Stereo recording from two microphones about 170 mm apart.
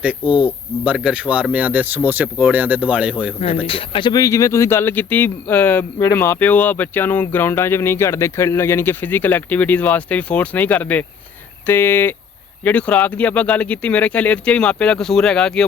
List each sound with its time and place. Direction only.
0.0 s speech: 5° right (ahead or behind)
3.7 s speech: 30° left (ahead or behind); by 15.6 s 5° left (ahead or behind)